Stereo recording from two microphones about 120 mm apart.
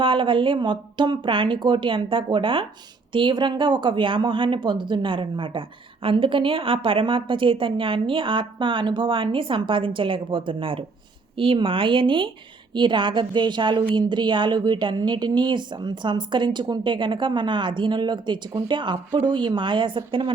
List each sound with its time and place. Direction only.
0.0 s a woman's voice: 45° right (ahead or behind)